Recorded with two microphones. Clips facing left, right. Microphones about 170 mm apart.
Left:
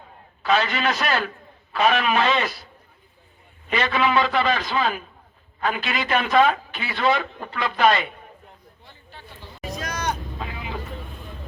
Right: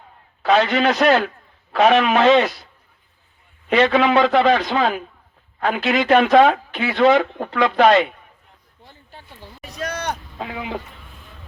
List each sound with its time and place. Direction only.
0.4 s speech: 75° right (ahead or behind)
3.7 s a man's voice: 75° right (ahead or behind)
8.8 s a sound: 45° right (ahead or behind)
9.6 s vehicle: 65° right (ahead or behind)